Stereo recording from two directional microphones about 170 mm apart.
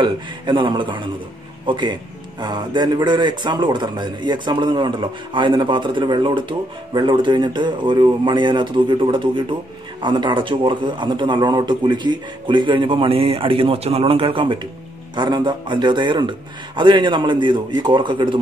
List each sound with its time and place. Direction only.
0.0 s a man's voice: 25° right (ahead or behind)